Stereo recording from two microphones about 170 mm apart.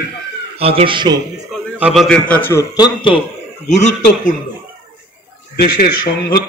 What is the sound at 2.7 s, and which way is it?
Speech, 25° left (ahead or behind).